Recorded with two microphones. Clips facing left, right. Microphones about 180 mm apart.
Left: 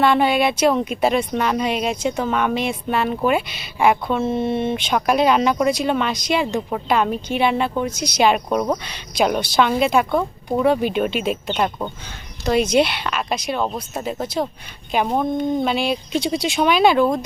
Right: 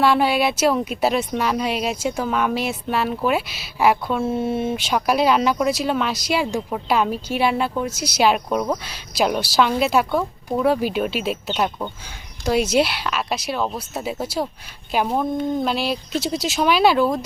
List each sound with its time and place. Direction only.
0.0 s speech: 5° right (ahead or behind)